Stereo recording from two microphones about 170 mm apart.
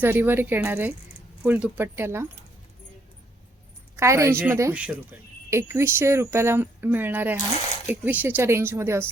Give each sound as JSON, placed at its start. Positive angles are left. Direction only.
{"t": 0.0, "sound": "speech", "side_deg": -10}
{"t": 3.9, "sound": "speech", "side_deg": -15}